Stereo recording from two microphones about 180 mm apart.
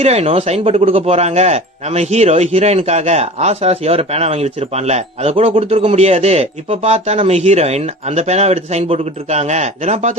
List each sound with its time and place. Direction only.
0.0 s speech: 35° right (ahead or behind)